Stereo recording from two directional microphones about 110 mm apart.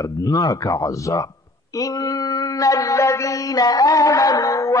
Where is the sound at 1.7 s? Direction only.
35° left (ahead or behind).